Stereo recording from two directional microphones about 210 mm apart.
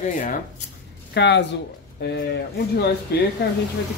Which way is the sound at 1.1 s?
55° left (ahead or behind).